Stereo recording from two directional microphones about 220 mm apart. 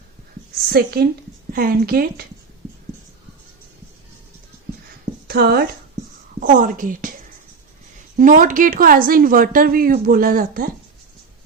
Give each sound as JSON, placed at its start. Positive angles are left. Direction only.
{"t": 0.7, "sound": "a woman's voice", "side_deg": -45}
{"t": 5.3, "sound": "a woman's voice", "side_deg": -45}
{"t": 8.2, "sound": "speech", "side_deg": -35}